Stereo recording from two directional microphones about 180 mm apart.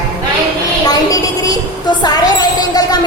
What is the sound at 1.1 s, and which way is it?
Music, 20° left (ahead or behind).